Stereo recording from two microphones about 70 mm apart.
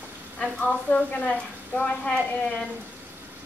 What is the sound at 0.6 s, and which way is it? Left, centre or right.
Speech, left.